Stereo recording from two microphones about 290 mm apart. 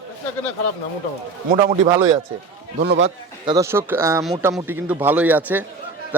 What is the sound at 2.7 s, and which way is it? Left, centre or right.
Speech, right.